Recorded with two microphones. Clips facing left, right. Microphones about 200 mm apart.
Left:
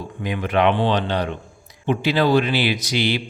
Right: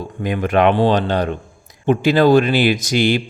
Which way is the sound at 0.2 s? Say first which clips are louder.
Right 4 dB; 45° right (ahead or behind).